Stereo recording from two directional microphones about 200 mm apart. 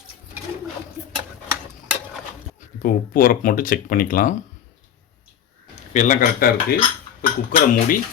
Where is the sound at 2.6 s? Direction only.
45° left (ahead or behind).